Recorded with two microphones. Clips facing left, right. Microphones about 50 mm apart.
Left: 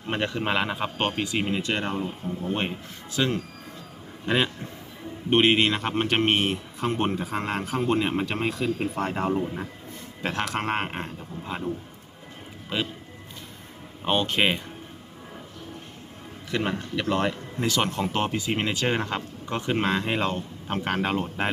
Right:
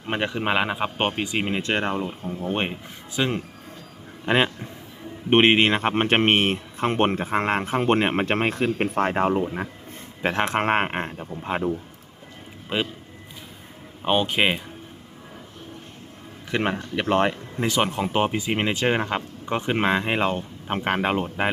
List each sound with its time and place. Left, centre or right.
0.1 s speech: centre
3.2 s speech: right
12.7 s speech: right
14.0 s speech: centre
16.5 s speech: right; by 21.5 s centre